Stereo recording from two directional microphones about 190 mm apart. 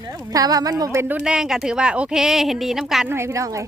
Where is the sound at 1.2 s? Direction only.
5° right (ahead or behind).